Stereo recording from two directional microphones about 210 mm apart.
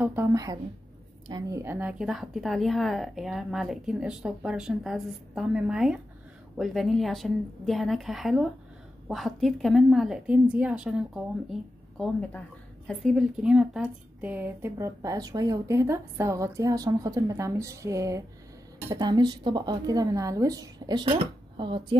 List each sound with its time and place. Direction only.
0.0 s a woman's voice: 10° right (ahead or behind)
12.0 s a woman's voice: 5° left (ahead or behind); by 21.9 s 25° right (ahead or behind)